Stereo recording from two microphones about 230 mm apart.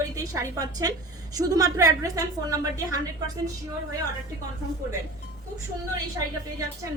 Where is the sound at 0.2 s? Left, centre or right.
Centre.